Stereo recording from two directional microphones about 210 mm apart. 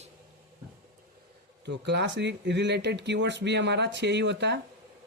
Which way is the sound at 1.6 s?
55° right (ahead or behind).